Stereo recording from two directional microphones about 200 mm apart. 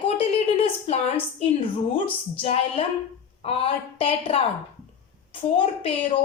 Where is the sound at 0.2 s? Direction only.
30° left (ahead or behind).